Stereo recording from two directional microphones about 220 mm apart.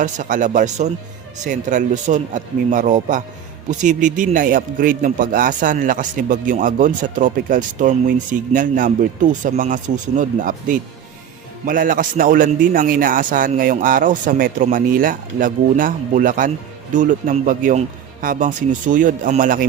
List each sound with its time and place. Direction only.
0.0 s a man's voice: 35° right (ahead or behind)